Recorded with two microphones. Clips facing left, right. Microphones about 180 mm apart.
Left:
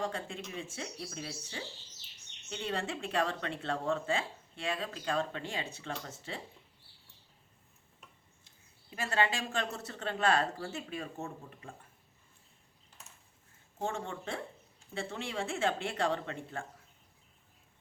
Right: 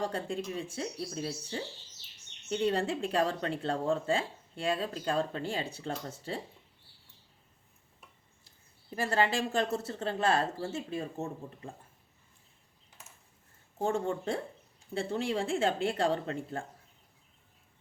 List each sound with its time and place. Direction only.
0.1 s speech: 35° right (ahead or behind)
8.4 s speech: 35° right (ahead or behind)
13.7 s speech: 35° right (ahead or behind)